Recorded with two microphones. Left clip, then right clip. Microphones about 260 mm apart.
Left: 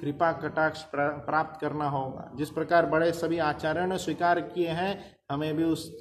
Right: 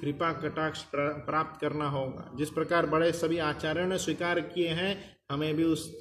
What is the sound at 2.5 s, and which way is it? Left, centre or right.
Speech, left.